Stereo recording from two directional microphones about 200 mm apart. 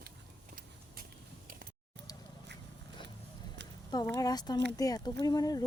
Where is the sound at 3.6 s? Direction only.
60° right (ahead or behind).